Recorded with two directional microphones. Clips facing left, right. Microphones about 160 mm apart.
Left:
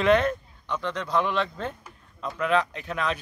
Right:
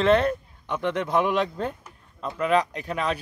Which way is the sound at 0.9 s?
50° right (ahead or behind).